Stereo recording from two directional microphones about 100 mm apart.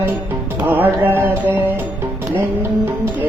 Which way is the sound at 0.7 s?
20° right (ahead or behind).